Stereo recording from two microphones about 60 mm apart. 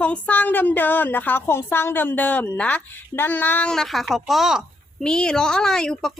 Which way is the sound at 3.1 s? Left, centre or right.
Left.